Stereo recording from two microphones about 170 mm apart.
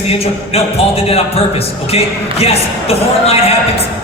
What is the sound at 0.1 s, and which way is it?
Speech, 35° left (ahead or behind).